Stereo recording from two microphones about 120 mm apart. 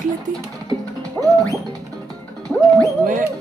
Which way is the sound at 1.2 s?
10° left (ahead or behind).